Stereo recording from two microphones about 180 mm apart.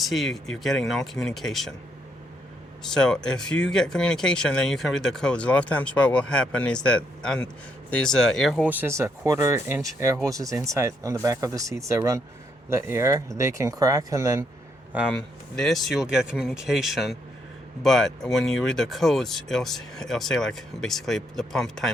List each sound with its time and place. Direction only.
0.0 s speech: centre (ahead or behind)
2.8 s speech: 5° left (ahead or behind); by 14.4 s 15° right (ahead or behind)
14.9 s speech: centre (ahead or behind)